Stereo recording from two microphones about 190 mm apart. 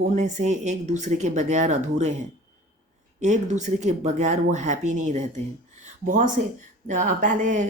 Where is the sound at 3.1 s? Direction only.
40° right (ahead or behind).